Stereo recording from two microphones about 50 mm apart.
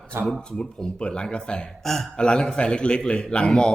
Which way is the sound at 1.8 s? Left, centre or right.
Centre.